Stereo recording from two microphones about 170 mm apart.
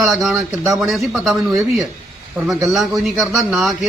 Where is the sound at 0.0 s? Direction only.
Centre (ahead or behind).